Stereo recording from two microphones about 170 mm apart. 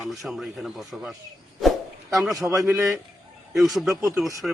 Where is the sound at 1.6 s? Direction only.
Centre (ahead or behind).